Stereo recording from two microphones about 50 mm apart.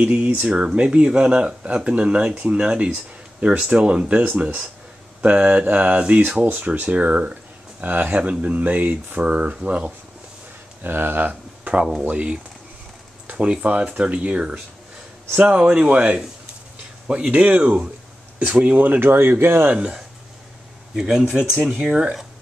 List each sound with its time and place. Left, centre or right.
0.1 s speech: right
5.2 s speech: right
7.8 s speech: right
9.2 s speech: right
10.8 s speech: right
11.2 s a sound: right
12.1 s speech: right
18.9 s speech: right
19.7 s speech: centre